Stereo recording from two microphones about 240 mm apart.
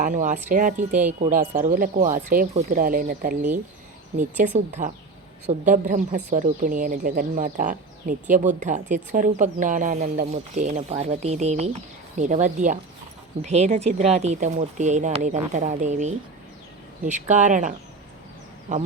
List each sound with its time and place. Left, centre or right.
0.0 s speech: right